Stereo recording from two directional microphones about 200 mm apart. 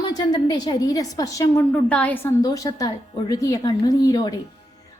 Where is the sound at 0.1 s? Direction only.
20° left (ahead or behind).